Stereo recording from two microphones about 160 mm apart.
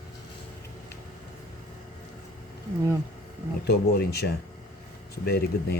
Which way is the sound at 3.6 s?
80° left.